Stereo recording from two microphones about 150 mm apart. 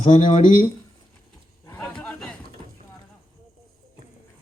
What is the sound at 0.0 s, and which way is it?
Speech, 55° left (ahead or behind).